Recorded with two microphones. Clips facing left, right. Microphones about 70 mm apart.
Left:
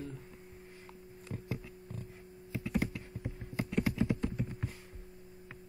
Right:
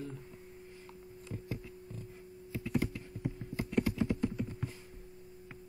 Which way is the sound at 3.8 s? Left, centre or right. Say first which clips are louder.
Even; left.